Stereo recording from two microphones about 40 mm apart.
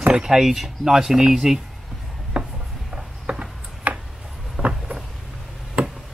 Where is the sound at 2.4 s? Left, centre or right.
Centre.